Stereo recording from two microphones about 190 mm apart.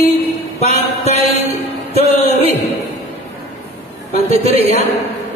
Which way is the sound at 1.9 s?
35° right (ahead or behind).